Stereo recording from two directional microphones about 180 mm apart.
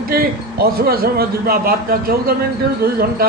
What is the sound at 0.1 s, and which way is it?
A man's voice, 55° right (ahead or behind).